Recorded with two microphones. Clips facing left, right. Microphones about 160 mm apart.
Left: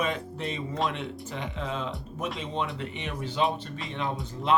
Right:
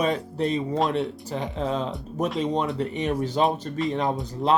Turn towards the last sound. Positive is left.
turn(degrees=-40)  # may be behind; listen again after turning